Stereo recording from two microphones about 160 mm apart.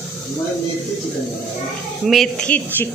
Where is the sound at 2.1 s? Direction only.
5° left (ahead or behind).